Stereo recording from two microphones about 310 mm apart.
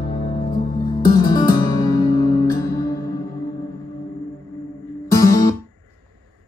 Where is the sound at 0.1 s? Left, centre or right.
Centre.